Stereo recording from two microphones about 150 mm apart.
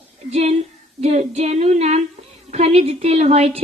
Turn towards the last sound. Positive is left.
turn(degrees=-40)  # may be behind; listen again after turning